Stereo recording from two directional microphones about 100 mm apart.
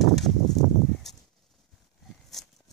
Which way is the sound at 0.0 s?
Centre (ahead or behind).